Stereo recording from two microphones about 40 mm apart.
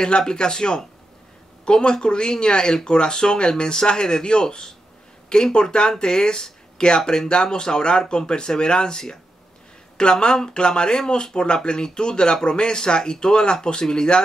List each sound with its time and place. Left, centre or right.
0.0 s speech: centre
10.2 s speech: centre